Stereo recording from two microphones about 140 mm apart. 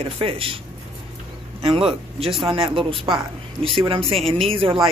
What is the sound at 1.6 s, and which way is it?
A man's voice, 40° right (ahead or behind).